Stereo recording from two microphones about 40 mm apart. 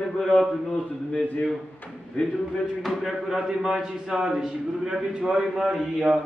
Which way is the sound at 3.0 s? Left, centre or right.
Centre.